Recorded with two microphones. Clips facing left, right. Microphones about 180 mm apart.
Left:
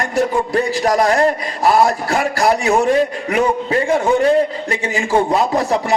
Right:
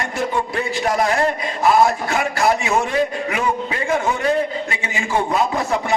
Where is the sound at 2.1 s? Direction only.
35° left (ahead or behind).